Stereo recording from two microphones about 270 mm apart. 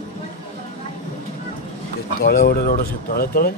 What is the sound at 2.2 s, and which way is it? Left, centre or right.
Speech, left.